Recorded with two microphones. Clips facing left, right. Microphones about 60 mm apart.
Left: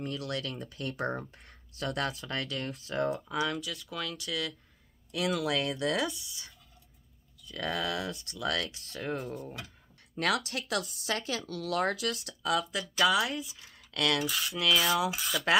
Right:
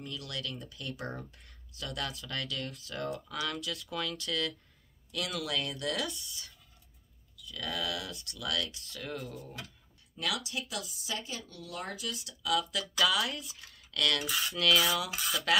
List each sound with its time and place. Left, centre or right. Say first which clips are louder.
0.0 s speech: left 5 dB; left
3.5 s speech: even; centre
5.5 s speech: left 5 dB; left
5.9 s speech: left 4 dB; centre
7.3 s speech: left 4 dB; left
8.5 s speech: left 2 dB; left
12.4 s speech: left 1 dB; left
13.0 s speech: left 4 dB; centre
14.2 s speech: even; centre